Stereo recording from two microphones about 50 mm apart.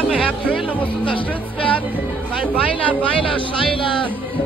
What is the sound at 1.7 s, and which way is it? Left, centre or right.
Music, right.